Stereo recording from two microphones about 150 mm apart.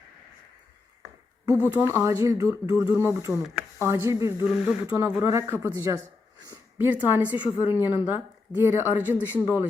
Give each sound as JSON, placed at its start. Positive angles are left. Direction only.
{"t": 1.5, "sound": "speech", "side_deg": -10}
{"t": 9.1, "sound": "speech", "side_deg": 15}